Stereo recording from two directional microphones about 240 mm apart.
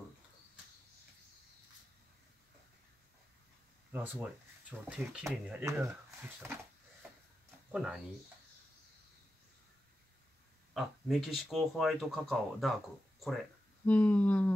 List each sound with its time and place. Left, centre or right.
3.9 s speech: centre
6.4 s a sound: centre
7.7 s speech: centre
10.7 s speech: centre
13.8 s speech: centre